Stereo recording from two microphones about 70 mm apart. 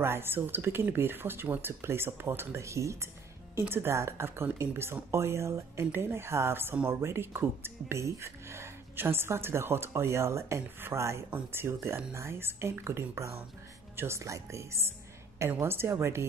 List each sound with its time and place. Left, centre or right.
0.0 s speech: right
3.5 s speech: right